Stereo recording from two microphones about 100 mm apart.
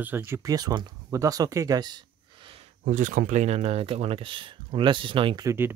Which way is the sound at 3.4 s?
90° right.